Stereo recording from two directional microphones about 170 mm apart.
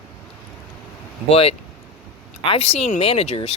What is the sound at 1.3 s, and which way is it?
Speech, 35° left (ahead or behind).